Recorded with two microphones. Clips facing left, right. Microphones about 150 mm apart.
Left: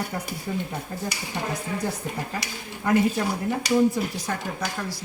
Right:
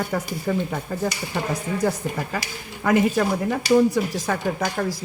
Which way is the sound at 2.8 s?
90° right.